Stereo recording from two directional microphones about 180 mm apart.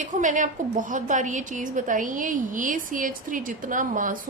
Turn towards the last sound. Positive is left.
turn(degrees=-50)  # may be behind; listen again after turning